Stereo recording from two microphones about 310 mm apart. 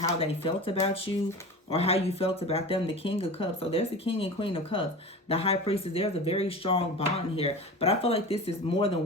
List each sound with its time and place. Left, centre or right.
0.0 s speech: centre